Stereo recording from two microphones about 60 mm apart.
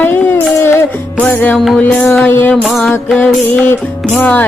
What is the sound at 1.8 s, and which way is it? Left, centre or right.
Music, left.